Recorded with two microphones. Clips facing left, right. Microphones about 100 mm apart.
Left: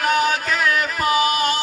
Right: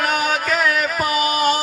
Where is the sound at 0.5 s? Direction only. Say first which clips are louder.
Right 1 dB; 25° right (ahead or behind).